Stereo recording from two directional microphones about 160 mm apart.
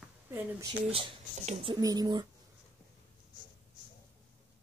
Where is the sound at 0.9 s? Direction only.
40° right (ahead or behind).